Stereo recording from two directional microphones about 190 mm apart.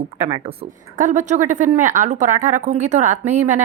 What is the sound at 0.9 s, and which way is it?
A woman's voice, 40° right (ahead or behind).